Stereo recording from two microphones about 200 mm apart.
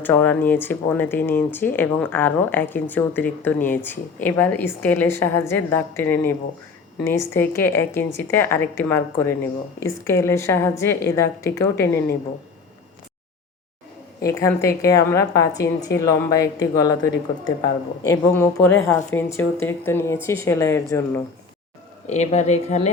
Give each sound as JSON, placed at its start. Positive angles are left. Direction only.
{"t": 0.0, "sound": "speech", "side_deg": 10}
{"t": 14.3, "sound": "speech", "side_deg": 15}
{"t": 22.0, "sound": "speech", "side_deg": 35}